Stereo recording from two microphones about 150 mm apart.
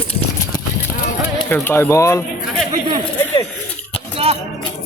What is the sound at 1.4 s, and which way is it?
Speech, 15° left (ahead or behind).